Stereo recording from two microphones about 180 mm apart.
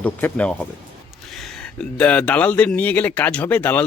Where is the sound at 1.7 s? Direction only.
5° left (ahead or behind).